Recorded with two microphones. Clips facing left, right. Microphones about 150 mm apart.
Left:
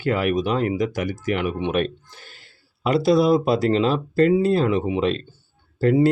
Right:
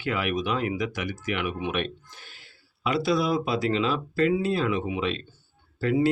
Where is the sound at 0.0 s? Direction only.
40° left (ahead or behind).